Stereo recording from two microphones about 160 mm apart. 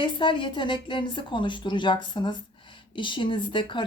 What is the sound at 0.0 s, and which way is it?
A woman's voice, 30° left (ahead or behind).